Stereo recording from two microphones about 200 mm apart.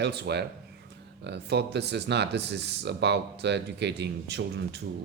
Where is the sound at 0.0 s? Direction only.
55° right (ahead or behind).